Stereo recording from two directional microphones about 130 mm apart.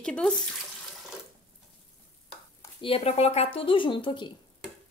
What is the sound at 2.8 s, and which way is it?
Speech, 50° left (ahead or behind).